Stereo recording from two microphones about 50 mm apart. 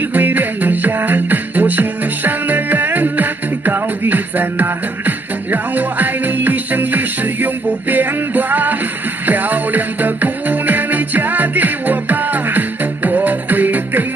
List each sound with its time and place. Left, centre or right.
0.1 s music: right